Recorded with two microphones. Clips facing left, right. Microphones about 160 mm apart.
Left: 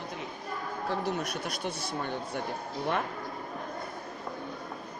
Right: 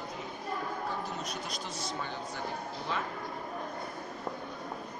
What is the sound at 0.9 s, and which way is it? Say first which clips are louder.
Speech: left 5 dB; 75° left (ahead or behind).